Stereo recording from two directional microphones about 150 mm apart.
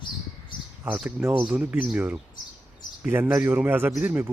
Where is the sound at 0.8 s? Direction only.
10° right (ahead or behind).